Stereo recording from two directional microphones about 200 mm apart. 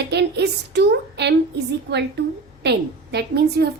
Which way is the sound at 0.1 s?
55° right (ahead or behind).